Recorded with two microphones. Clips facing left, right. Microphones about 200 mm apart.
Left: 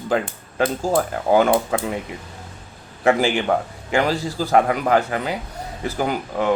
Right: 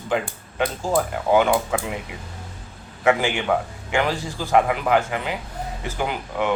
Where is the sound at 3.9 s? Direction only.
40° left (ahead or behind).